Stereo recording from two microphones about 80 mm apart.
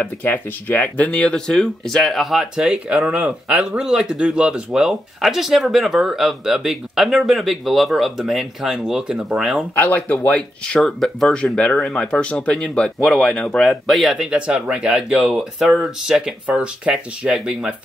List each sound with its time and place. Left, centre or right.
0.0 s speech: left; by 9.7 s centre
9.8 s speech: centre
11.4 s speech: centre
13.7 s speech: centre
14.3 s speech: centre